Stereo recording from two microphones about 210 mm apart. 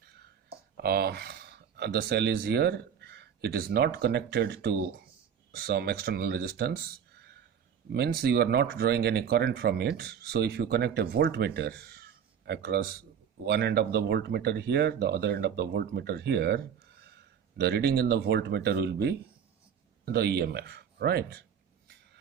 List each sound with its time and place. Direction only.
0.8 s speech: 50° right (ahead or behind)
7.9 s speech: 50° right (ahead or behind)